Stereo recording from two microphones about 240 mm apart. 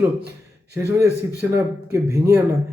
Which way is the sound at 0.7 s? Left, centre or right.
Centre.